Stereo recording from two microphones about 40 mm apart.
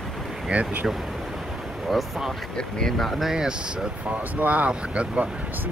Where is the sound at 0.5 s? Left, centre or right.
Right.